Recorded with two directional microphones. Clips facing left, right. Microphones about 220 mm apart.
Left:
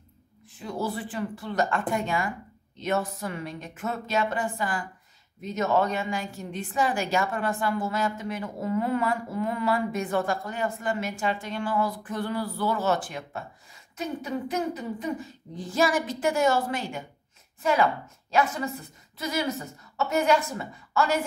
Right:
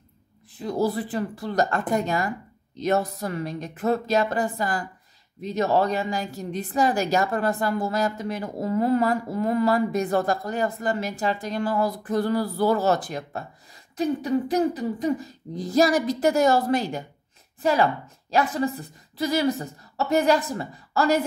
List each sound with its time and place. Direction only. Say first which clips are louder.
0.6 s a woman's voice: right 6 dB; 40° right (ahead or behind)